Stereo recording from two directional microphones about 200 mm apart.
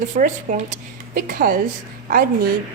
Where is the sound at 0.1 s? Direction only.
40° right (ahead or behind).